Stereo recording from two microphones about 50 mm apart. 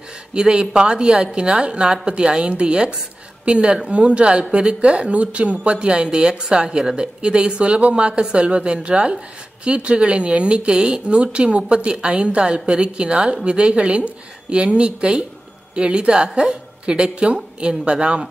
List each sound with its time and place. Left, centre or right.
0.3 s a woman's voice: centre
16.8 s speech: centre